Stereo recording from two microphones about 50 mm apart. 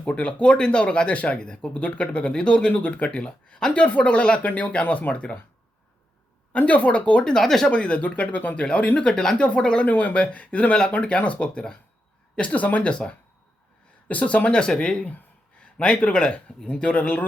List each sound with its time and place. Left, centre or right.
0.0 s speech: left
6.5 s speech: left
7.3 s speech: centre
7.7 s speech: left
9.8 s speech: left